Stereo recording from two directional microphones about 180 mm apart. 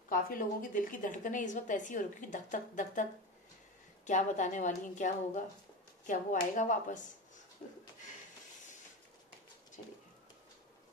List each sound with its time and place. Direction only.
0.1 s a woman's voice: 50° left (ahead or behind)